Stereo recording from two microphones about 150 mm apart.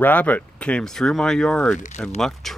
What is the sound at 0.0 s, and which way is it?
Speech, 10° left (ahead or behind).